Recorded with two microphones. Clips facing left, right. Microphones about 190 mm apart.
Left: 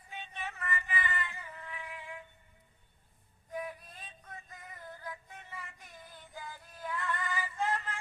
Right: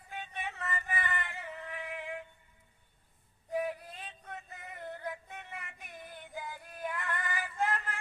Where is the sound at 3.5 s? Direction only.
70° right (ahead or behind).